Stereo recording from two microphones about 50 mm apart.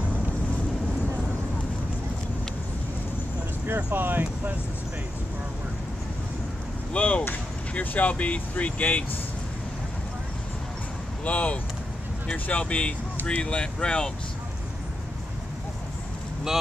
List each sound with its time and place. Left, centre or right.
3.6 s speech: right
6.9 s speech: left
11.2 s speech: left